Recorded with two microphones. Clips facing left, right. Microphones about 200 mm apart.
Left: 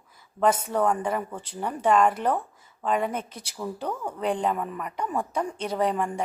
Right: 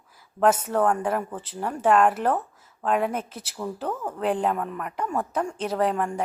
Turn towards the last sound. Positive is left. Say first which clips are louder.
# right 1 dB
turn(degrees=0)  # may be behind; listen again after turning